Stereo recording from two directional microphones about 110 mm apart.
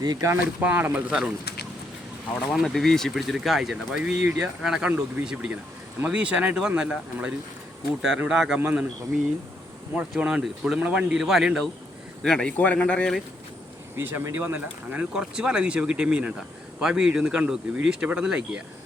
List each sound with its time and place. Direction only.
0.0 s speech: 40° right (ahead or behind)
0.6 s speech: 15° right (ahead or behind)
2.5 s speech: 5° left (ahead or behind); by 8.9 s 10° right (ahead or behind)
9.9 s speech: 10° right (ahead or behind); by 13.2 s 5° left (ahead or behind)
13.9 s speech: 20° right (ahead or behind)